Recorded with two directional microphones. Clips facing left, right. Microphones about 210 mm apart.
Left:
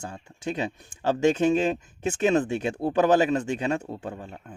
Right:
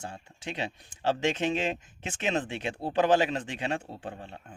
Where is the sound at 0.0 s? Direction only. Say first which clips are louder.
Left 6 dB; 45° left (ahead or behind).